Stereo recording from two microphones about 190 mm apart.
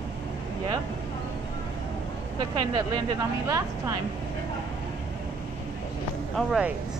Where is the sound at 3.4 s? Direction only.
15° right (ahead or behind).